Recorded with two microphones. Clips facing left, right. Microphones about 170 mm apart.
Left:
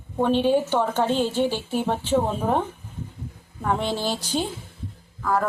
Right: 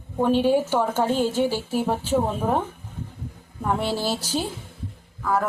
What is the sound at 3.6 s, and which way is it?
A woman's voice, 5° right (ahead or behind).